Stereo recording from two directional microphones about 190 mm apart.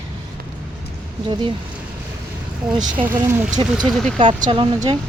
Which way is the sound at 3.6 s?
20° right (ahead or behind).